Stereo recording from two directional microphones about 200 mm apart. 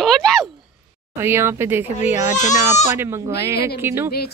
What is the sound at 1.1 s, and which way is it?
A woman's voice, 10° right (ahead or behind).